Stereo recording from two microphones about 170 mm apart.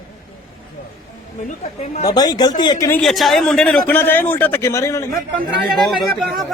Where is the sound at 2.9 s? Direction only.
Centre (ahead or behind).